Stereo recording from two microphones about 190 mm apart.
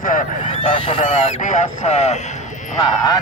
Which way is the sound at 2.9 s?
20° left (ahead or behind).